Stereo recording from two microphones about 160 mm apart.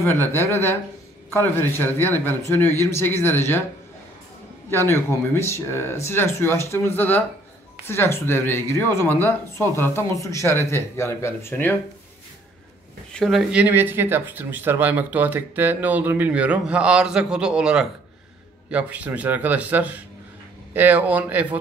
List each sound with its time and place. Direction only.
0.0 s speech: 15° left (ahead or behind)
4.6 s speech: 15° left (ahead or behind)
13.1 s speech: centre (ahead or behind)